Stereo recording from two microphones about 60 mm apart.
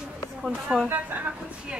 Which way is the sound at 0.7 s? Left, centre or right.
Right.